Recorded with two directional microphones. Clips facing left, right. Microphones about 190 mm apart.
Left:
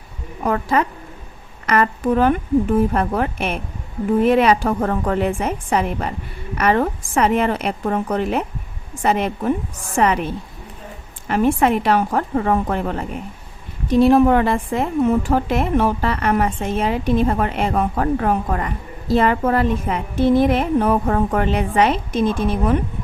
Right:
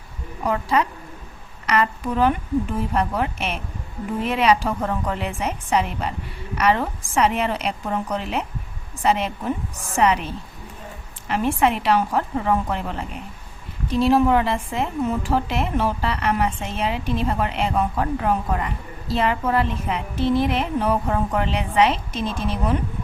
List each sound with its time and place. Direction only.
0.4 s a woman's voice: 50° left (ahead or behind)